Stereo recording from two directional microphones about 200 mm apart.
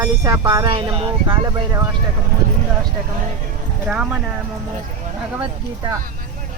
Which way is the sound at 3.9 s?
5° right (ahead or behind).